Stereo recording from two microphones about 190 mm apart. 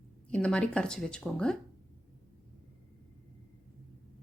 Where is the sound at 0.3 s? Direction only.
5° left (ahead or behind).